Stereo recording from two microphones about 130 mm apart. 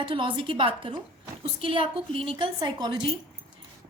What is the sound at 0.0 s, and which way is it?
A woman's voice, 40° right (ahead or behind).